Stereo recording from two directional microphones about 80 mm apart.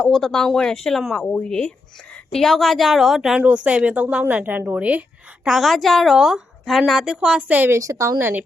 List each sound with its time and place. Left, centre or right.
0.1 s a woman's voice: centre
5.5 s a woman's voice: centre; by 7.7 s right
7.7 s a woman's voice: right
8.2 s a woman's voice: right